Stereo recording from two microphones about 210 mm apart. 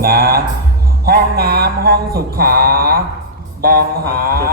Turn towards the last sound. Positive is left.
turn(degrees=-45)  # may be behind; listen again after turning